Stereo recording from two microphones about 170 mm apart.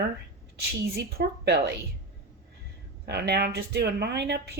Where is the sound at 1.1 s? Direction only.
75° right (ahead or behind).